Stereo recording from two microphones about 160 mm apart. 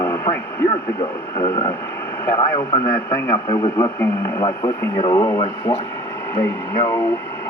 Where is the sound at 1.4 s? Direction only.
35° left (ahead or behind).